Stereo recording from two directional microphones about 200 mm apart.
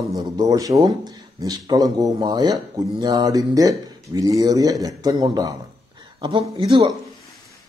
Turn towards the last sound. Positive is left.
turn(degrees=-20)  # may be behind; listen again after turning